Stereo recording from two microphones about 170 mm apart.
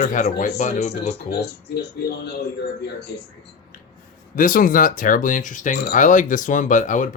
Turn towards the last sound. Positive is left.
turn(degrees=50)  # may be behind; listen again after turning